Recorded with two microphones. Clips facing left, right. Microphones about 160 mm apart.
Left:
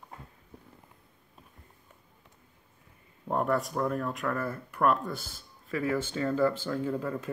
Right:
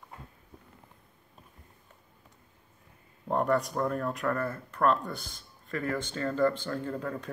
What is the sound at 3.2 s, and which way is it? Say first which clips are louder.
Speech: right 1 dB; centre (ahead or behind).